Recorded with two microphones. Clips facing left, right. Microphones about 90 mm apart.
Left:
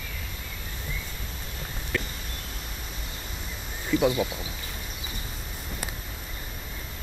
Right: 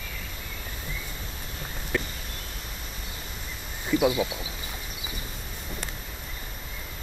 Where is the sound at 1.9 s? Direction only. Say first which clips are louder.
Right 2 dB; 15° right (ahead or behind).